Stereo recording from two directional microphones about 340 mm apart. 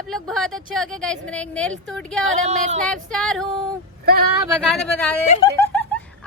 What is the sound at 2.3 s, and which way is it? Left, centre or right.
Speech, right.